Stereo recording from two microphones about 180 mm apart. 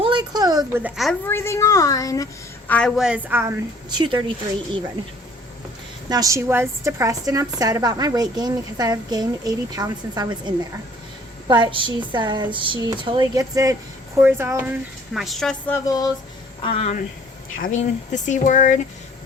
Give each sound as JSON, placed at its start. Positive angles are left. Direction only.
{"t": 0.0, "sound": "a sound", "side_deg": -25}
{"t": 0.8, "sound": "a woman's voice", "side_deg": -5}
{"t": 1.3, "sound": "a woman's voice", "side_deg": 15}
{"t": 2.6, "sound": "a woman's voice", "side_deg": 5}
{"t": 3.8, "sound": "a woman's voice", "side_deg": -25}
{"t": 6.1, "sound": "a woman's voice", "side_deg": -20}
{"t": 15.1, "sound": "a woman's voice", "side_deg": 0}
{"t": 15.9, "sound": "speech", "side_deg": 20}
{"t": 16.6, "sound": "speech", "side_deg": 35}